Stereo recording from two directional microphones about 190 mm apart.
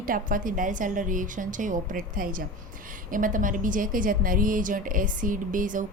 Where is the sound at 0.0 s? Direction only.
45° right (ahead or behind).